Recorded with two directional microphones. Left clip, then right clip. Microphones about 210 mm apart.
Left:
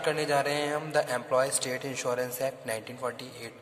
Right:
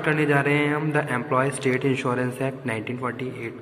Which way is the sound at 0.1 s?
45° left (ahead or behind).